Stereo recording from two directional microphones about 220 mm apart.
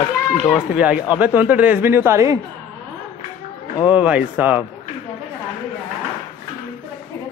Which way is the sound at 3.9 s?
5° right (ahead or behind).